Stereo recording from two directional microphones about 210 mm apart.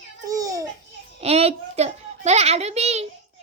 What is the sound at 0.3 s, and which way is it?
Babbling, 15° right (ahead or behind).